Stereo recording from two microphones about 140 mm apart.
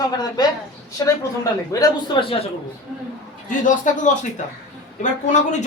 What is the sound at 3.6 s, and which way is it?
Speech, 65° left (ahead or behind).